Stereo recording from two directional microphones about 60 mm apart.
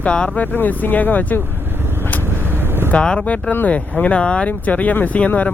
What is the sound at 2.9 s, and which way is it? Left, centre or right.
Speech, centre.